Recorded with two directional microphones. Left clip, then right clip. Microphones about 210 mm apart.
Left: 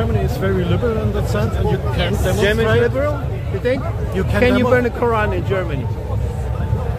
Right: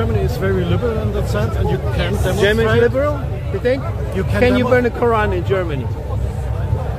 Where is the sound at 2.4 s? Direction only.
50° right (ahead or behind).